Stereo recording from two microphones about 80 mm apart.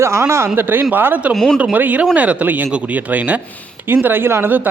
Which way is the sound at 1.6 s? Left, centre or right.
Centre.